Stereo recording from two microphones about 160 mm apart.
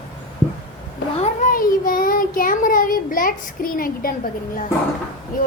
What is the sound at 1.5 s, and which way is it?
Child singing, 60° left (ahead or behind).